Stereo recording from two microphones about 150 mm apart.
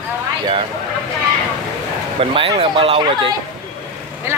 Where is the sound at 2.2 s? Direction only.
40° right (ahead or behind).